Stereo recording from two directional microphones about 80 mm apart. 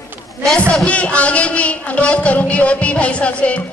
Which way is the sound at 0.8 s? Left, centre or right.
Centre.